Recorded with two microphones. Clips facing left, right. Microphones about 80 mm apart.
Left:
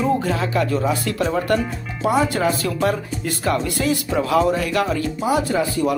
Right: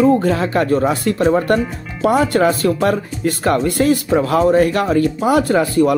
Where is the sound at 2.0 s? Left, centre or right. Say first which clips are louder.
Right 5 dB; right.